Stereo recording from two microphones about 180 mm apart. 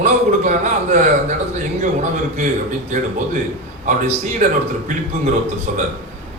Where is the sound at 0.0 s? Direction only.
40° right (ahead or behind).